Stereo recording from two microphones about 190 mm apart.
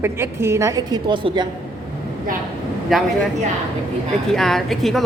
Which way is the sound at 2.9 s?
Centre (ahead or behind).